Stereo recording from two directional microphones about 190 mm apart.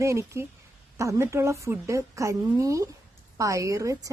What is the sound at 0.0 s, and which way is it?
A woman's voice, 15° right (ahead or behind).